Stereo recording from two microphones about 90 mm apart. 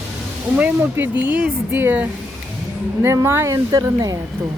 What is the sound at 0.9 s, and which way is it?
A woman's voice, 20° right (ahead or behind).